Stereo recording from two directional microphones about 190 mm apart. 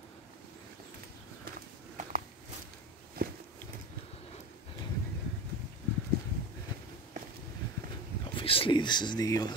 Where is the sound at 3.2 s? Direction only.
50° right (ahead or behind).